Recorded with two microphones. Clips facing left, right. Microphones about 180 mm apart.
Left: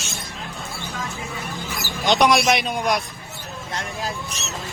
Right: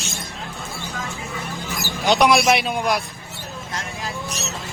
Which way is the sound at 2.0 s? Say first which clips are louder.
Right 1 dB; 5° right (ahead or behind).